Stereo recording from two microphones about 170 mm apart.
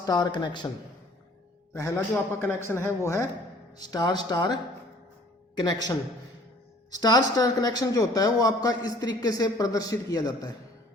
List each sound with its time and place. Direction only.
0.0 s a man's voice: 25° left (ahead or behind)
1.7 s a man's voice: 15° left (ahead or behind)